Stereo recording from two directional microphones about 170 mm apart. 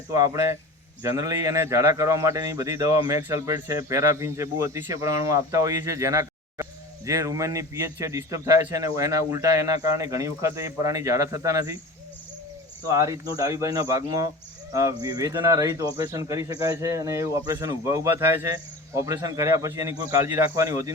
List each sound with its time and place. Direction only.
0.1 s a man's voice: 20° right (ahead or behind)
12.9 s a man's voice: 20° right (ahead or behind)